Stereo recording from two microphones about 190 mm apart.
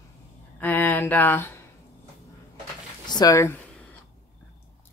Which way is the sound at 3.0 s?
20° left (ahead or behind).